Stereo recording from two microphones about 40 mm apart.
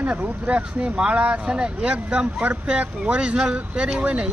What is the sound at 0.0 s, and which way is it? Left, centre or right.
Speech, right.